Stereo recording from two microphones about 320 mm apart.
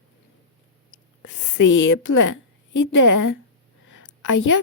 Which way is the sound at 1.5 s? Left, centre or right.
Left.